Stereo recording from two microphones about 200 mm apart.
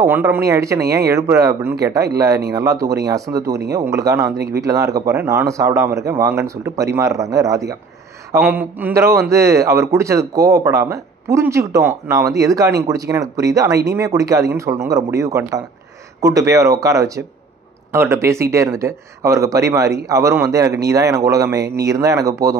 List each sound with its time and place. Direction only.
0.0 s speech: 10° right (ahead or behind)